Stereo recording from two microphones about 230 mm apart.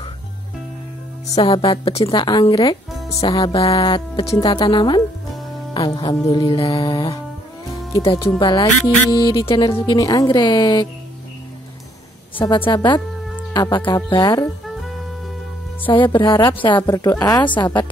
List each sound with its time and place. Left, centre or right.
1.3 s speech: left
12.4 s speech: left
15.8 s speech: left